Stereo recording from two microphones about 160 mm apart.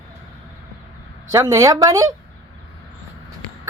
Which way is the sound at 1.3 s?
20° right (ahead or behind).